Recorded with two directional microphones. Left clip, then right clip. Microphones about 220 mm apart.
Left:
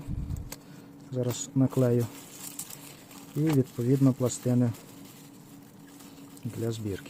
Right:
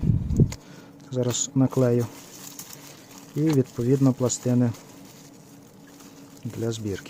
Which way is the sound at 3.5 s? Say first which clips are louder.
Right 4 dB; 10° right (ahead or behind).